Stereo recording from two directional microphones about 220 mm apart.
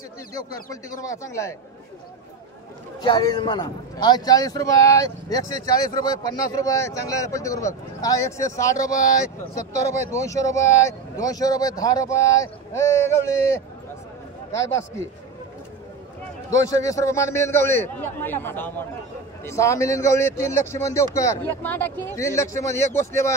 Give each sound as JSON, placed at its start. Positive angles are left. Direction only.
{"t": 1.0, "sound": "speech", "side_deg": 15}
{"t": 3.0, "sound": "speech", "side_deg": 20}
{"t": 16.4, "sound": "speech", "side_deg": 15}